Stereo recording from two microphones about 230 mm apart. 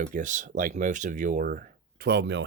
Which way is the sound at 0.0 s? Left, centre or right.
Right.